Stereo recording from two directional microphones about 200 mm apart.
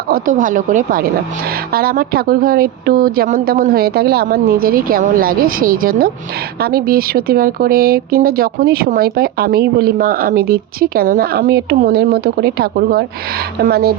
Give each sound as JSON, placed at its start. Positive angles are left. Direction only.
{"t": 0.1, "sound": "speech", "side_deg": -40}